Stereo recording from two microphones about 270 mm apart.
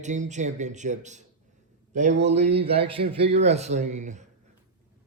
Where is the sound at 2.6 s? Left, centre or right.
Right.